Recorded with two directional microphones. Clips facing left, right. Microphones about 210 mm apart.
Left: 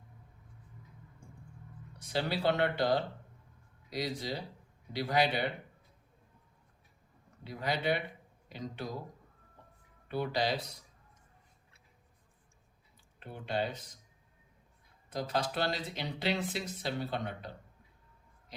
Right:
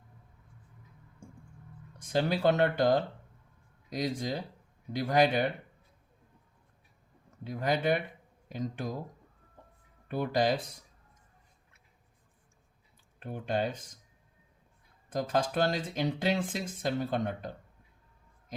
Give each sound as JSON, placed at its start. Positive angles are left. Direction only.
{"t": 2.0, "sound": "speech", "side_deg": -50}
{"t": 7.4, "sound": "speech", "side_deg": -50}
{"t": 9.6, "sound": "music", "side_deg": -50}
{"t": 10.1, "sound": "speech", "side_deg": -50}
{"t": 13.1, "sound": "speech", "side_deg": -45}
{"t": 15.1, "sound": "speech", "side_deg": -50}